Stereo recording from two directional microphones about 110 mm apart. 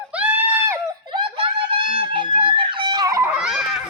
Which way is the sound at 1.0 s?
50° right (ahead or behind).